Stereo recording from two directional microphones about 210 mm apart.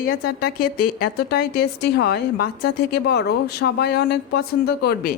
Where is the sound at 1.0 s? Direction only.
50° left (ahead or behind).